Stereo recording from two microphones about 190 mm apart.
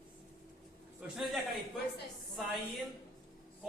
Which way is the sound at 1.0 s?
5° right (ahead or behind).